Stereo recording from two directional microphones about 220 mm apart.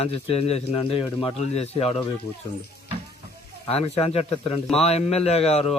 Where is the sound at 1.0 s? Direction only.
Centre (ahead or behind).